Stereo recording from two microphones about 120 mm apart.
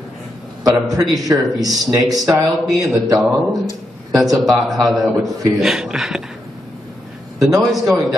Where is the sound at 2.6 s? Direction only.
Centre (ahead or behind).